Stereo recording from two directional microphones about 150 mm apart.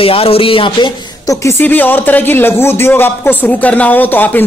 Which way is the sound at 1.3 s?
20° left (ahead or behind).